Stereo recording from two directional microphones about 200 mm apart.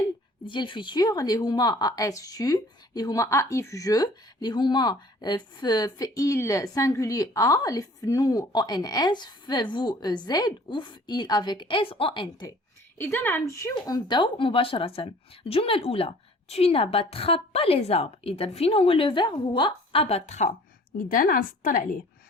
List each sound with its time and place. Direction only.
0.4 s a woman's voice: 25° left (ahead or behind)
13.0 s a woman's voice: 10° left (ahead or behind); by 20.5 s 35° left (ahead or behind)
21.1 s a woman's voice: 45° left (ahead or behind)